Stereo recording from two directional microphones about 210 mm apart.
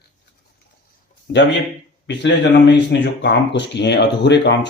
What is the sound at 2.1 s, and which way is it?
Speech, 55° left (ahead or behind).